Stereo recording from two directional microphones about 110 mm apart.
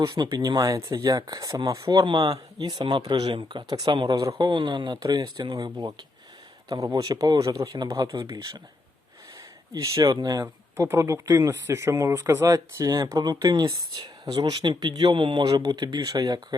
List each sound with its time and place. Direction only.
0.0 s speech: 40° right (ahead or behind)
9.7 s speech: 30° right (ahead or behind)
10.4 s speech: 25° right (ahead or behind); by 15.4 s 50° right (ahead or behind)
15.4 s speech: 35° right (ahead or behind)